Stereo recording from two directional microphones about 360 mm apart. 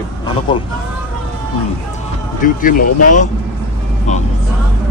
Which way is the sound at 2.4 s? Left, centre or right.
Left.